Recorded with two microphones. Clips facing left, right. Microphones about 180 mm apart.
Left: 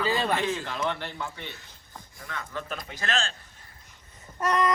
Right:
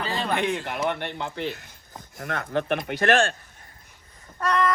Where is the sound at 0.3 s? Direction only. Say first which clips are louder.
Right 3 dB; 60° right (ahead or behind).